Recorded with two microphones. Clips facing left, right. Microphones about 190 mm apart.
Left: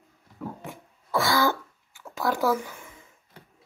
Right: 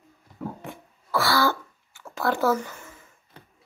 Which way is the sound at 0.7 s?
15° left (ahead or behind).